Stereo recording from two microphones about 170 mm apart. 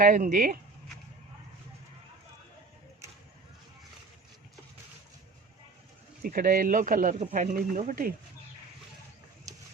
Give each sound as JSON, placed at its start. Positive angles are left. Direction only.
{"t": 0.0, "sound": "speech", "side_deg": -55}
{"t": 6.2, "sound": "speech", "side_deg": -55}